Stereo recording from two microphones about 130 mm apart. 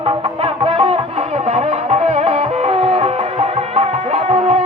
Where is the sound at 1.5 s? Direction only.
55° right (ahead or behind).